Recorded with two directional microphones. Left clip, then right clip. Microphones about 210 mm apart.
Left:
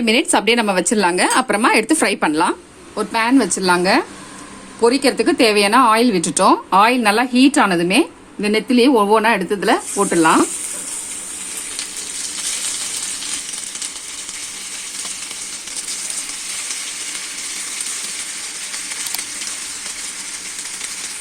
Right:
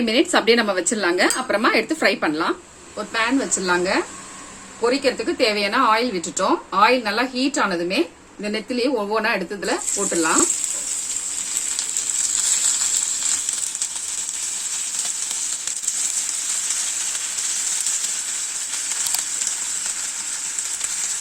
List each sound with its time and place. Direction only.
0.0 s a woman's voice: 40° left (ahead or behind)
3.1 s speech: 55° left (ahead or behind)